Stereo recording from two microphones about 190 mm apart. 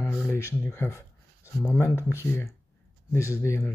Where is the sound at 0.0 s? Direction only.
10° left (ahead or behind).